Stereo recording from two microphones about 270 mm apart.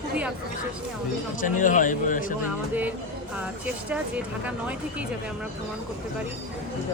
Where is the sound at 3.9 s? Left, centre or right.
Centre.